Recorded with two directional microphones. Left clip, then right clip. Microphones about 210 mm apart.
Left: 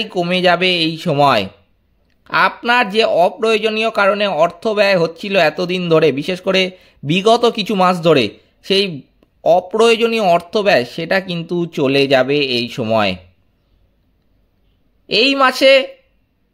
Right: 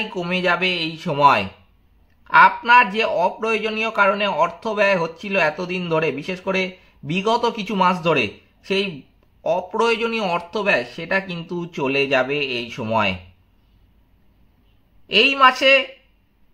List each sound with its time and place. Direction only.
0.1 s speech: 40° left (ahead or behind)
15.0 s speech: 45° left (ahead or behind)